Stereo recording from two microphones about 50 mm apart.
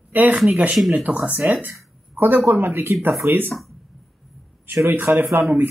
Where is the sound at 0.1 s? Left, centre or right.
Right.